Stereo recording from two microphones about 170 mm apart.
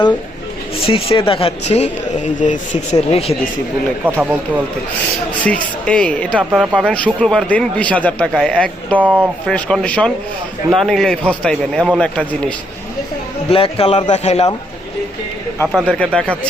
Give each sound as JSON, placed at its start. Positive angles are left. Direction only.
{"t": 0.9, "sound": "speech", "side_deg": 35}
{"t": 4.2, "sound": "speech", "side_deg": -10}
{"t": 5.4, "sound": "a man's voice", "side_deg": 5}
{"t": 6.5, "sound": "a man's voice", "side_deg": -5}
{"t": 9.0, "sound": "speech", "side_deg": -10}
{"t": 9.5, "sound": "a man's voice", "side_deg": 5}
{"t": 13.5, "sound": "speech", "side_deg": 35}
{"t": 15.6, "sound": "a man's voice", "side_deg": -5}
{"t": 16.0, "sound": "a man's voice", "side_deg": 5}